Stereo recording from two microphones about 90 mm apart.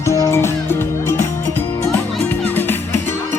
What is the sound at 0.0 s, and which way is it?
Music, 35° left (ahead or behind).